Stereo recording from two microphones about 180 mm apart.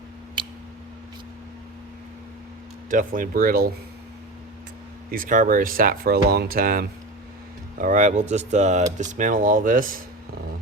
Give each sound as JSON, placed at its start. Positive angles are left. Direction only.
{"t": 0.4, "sound": "a sound", "side_deg": -25}
{"t": 2.9, "sound": "speech", "side_deg": -50}
{"t": 5.1, "sound": "speech", "side_deg": -50}